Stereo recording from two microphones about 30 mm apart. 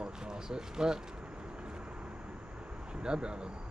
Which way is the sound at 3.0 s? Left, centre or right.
Right.